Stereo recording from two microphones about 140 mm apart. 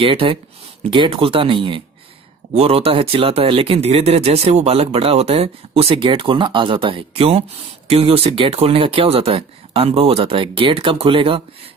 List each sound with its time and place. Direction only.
0.0 s speech: 40° right (ahead or behind)